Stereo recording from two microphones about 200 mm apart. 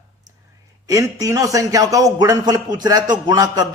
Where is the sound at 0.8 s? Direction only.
15° right (ahead or behind).